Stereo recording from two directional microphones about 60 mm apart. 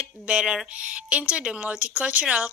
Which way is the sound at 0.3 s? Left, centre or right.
Centre.